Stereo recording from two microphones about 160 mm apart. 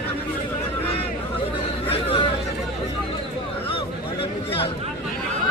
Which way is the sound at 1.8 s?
35° left (ahead or behind).